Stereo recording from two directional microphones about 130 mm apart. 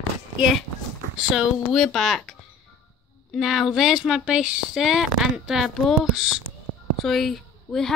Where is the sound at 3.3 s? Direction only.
Centre (ahead or behind).